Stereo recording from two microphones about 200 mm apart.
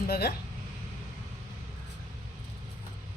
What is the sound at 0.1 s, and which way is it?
Speech, 50° left (ahead or behind).